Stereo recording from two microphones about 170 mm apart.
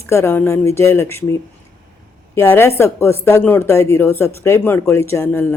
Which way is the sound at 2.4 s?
15° left (ahead or behind).